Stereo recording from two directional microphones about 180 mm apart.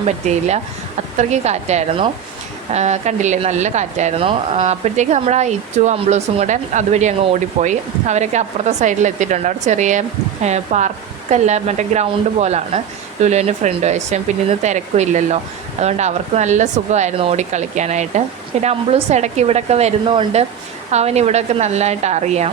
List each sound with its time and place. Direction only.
0.0 s speech: 40° right (ahead or behind)